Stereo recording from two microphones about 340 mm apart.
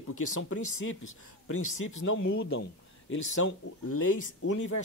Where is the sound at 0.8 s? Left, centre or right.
Left.